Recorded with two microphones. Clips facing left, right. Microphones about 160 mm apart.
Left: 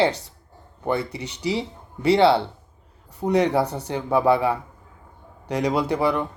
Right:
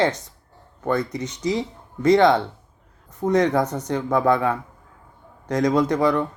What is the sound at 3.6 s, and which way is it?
Speech, 35° left (ahead or behind).